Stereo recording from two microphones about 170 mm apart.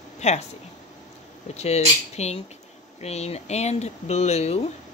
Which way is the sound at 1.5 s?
40° left (ahead or behind).